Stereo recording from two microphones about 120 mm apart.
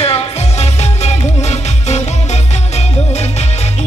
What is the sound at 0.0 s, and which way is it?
Music, 60° left (ahead or behind).